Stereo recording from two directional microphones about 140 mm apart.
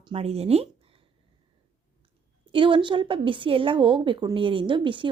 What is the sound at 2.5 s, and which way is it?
A woman's voice, 35° right (ahead or behind).